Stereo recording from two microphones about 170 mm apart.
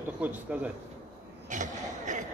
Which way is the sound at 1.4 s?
50° right (ahead or behind).